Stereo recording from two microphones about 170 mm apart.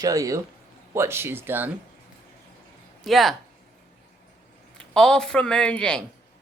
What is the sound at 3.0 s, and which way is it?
Speech, centre (ahead or behind).